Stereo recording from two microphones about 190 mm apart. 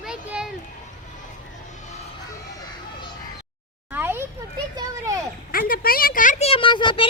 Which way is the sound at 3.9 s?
10° right (ahead or behind).